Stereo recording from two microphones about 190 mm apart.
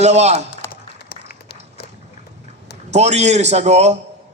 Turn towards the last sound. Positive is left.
turn(degrees=-35)  # may be behind; listen again after turning